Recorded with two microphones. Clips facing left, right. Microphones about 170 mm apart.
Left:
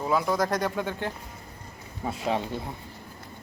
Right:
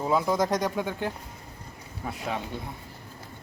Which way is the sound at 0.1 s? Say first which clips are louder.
Right 1 dB; 20° right (ahead or behind).